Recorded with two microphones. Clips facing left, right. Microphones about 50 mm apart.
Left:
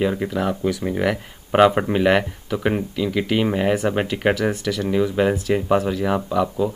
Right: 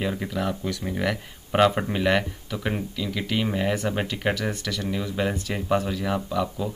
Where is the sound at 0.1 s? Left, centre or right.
Centre.